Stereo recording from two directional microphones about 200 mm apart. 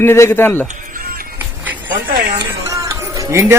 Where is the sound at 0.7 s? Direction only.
45° right (ahead or behind).